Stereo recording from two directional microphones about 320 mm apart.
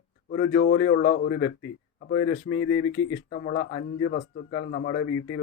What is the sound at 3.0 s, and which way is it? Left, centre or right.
A man's voice, left.